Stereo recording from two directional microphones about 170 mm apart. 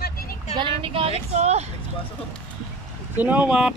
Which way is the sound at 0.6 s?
35° right (ahead or behind).